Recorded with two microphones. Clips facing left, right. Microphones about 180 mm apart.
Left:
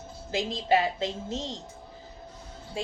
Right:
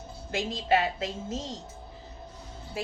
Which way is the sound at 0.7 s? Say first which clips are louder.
Left 1 dB; 30° left (ahead or behind).